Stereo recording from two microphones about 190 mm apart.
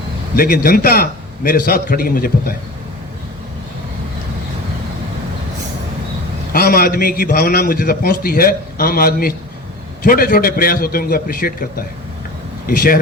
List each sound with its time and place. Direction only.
0.3 s a man's voice: 50° left (ahead or behind)
6.5 s a man's voice: 50° left (ahead or behind)